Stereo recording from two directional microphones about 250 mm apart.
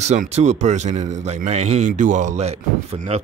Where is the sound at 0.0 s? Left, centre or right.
Right.